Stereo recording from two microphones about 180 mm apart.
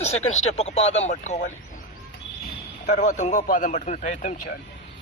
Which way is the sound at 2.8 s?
40° left (ahead or behind).